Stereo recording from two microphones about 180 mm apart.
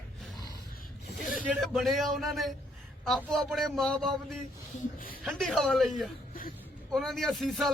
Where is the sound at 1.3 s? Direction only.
Centre (ahead or behind).